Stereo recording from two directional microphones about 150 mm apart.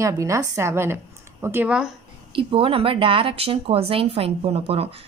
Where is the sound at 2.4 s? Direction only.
35° right (ahead or behind).